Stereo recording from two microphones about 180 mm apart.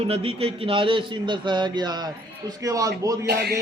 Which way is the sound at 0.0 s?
30° right (ahead or behind).